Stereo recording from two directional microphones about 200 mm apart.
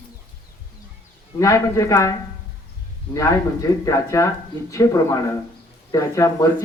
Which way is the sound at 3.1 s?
15° left (ahead or behind).